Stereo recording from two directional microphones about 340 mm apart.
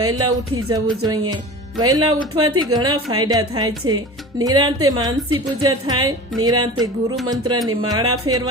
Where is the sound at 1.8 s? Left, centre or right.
Centre.